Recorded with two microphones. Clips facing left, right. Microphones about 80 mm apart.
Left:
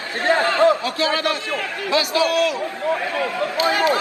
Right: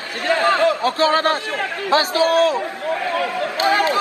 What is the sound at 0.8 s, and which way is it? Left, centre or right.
A man's voice, right.